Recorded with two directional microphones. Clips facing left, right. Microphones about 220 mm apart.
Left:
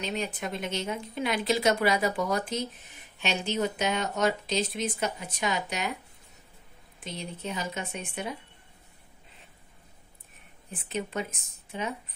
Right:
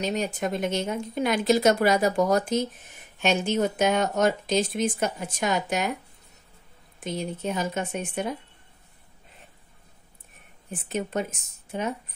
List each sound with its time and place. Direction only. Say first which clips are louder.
0.0 s speech: right 5 dB; 40° right (ahead or behind)
7.1 s speech: right 7 dB; 50° right (ahead or behind)
10.7 s speech: right 4 dB; 45° right (ahead or behind)